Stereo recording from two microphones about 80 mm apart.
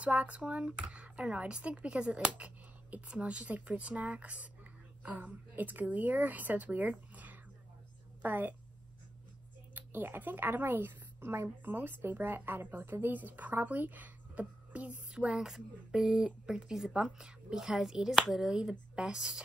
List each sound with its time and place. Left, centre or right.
0.0 s a woman's voice: centre
9.8 s a woman's voice: right; by 19.4 s centre